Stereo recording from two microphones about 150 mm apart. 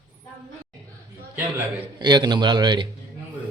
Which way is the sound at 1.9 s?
30° right (ahead or behind).